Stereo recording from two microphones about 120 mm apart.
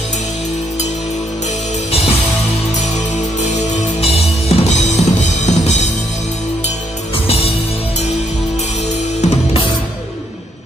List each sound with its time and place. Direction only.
1.9 s music: 55° left (ahead or behind)
3.4 s music: 65° left (ahead or behind)
7.2 s music: 55° left (ahead or behind)
9.2 s music: 55° left (ahead or behind)